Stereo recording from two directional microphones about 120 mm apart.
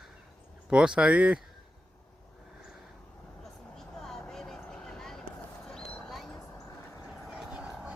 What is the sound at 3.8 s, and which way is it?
Vehicle, 5° left (ahead or behind).